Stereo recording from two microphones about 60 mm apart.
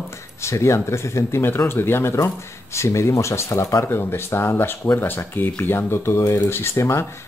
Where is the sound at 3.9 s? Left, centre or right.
Left.